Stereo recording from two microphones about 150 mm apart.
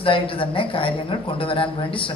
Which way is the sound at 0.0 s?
35° left (ahead or behind).